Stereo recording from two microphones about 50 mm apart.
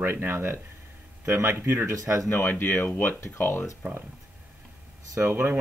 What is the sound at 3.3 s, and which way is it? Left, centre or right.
Speech, left.